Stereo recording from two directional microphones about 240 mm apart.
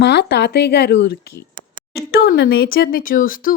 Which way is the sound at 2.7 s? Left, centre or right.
Left.